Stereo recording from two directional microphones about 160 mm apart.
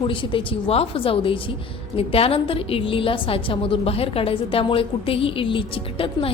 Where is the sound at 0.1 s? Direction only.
30° left (ahead or behind).